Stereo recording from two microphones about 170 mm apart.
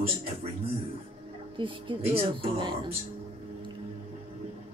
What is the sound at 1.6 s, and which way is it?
A woman's voice, 30° right (ahead or behind).